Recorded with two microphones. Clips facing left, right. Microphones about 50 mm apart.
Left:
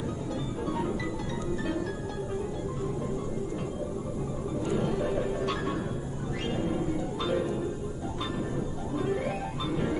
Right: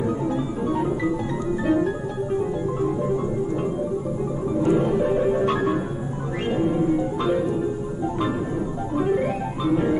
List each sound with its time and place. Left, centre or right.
4.6 s music: right
8.9 s music: right